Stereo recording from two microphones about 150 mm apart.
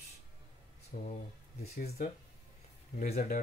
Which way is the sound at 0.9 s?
70° left (ahead or behind).